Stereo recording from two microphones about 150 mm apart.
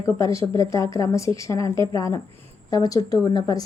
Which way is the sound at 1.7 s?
30° right (ahead or behind).